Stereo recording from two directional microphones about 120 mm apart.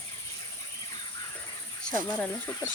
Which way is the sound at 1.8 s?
10° left (ahead or behind).